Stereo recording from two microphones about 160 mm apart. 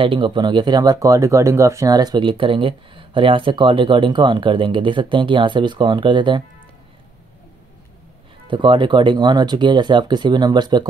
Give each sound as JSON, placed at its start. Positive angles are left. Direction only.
{"t": 0.0, "sound": "speech", "side_deg": -30}
{"t": 8.5, "sound": "speech", "side_deg": -30}